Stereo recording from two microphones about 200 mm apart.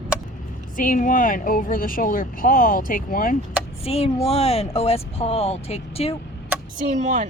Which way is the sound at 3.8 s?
30° left (ahead or behind).